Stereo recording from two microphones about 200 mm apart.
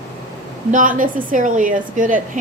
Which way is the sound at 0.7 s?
40° right (ahead or behind).